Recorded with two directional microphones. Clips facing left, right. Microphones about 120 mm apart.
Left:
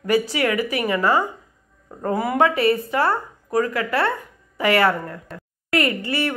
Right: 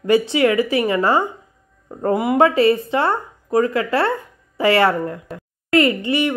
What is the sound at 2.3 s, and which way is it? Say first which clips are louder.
Speech: right 4 dB; 30° right (ahead or behind).